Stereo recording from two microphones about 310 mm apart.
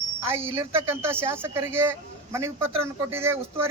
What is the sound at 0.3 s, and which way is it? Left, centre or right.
A man's voice, centre.